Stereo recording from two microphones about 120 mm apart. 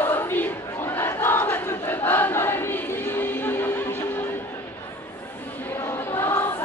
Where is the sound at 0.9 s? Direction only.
20° left (ahead or behind).